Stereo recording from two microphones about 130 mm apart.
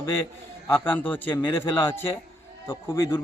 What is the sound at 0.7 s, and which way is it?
A man's voice, 15° left (ahead or behind).